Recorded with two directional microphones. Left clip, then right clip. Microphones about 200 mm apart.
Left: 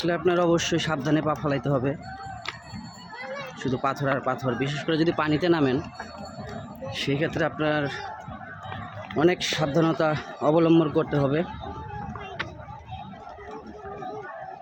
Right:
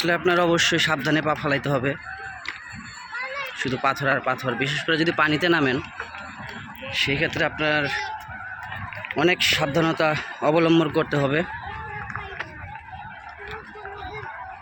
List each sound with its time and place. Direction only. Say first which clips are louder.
0.0 s a man's voice: right 3 dB; 5° left (ahead or behind)
3.6 s a man's voice: right 3 dB; 10° left (ahead or behind)
6.9 s speech: right 4 dB; 20° left (ahead or behind)
9.0 s a man's voice: right 3 dB; 15° left (ahead or behind)